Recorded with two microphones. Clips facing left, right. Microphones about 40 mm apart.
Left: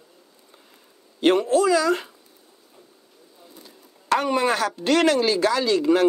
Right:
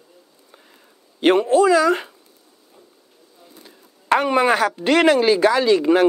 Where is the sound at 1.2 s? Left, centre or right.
Centre.